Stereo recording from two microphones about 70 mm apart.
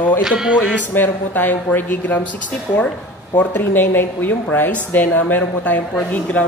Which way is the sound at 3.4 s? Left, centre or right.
Left.